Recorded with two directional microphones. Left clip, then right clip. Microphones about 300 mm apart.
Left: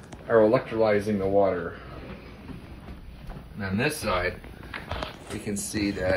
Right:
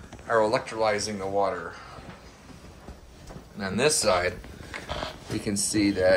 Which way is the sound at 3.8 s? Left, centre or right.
Centre.